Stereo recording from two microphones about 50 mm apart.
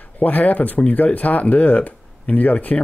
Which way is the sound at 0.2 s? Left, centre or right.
Left.